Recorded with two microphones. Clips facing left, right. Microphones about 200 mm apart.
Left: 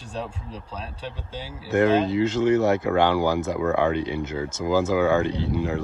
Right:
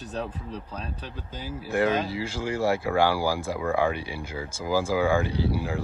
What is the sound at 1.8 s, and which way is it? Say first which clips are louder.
Speech: left 6 dB; 25° left (ahead or behind).